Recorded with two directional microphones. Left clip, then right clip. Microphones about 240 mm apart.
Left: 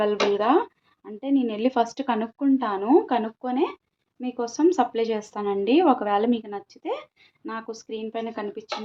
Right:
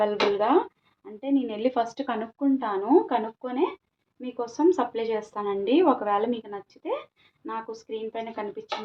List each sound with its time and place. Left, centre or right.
0.0 s a woman's voice: left